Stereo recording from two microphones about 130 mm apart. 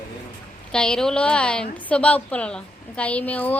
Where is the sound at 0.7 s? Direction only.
5° left (ahead or behind).